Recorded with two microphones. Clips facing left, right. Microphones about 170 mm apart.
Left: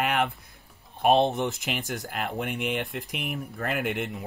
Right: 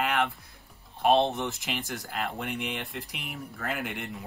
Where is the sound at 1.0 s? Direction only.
15° left (ahead or behind).